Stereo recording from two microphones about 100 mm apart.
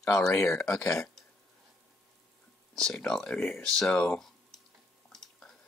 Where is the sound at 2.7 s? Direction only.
5° left (ahead or behind).